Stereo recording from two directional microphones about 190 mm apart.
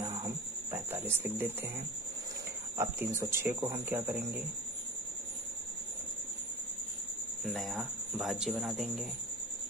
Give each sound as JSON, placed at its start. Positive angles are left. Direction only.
{"t": 0.0, "sound": "cricket", "side_deg": -25}
{"t": 1.0, "sound": "speech", "side_deg": -10}
{"t": 2.8, "sound": "speech", "side_deg": -15}
{"t": 7.4, "sound": "speech", "side_deg": 0}